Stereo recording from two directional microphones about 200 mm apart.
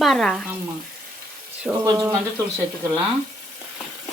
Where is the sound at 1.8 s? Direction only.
15° right (ahead or behind).